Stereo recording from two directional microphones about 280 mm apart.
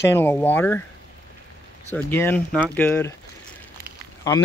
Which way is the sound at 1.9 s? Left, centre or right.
Centre.